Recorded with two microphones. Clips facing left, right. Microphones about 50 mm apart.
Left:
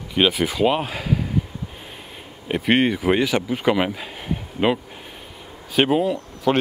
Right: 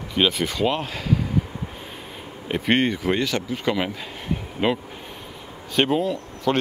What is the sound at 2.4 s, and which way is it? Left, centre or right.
Speech, centre.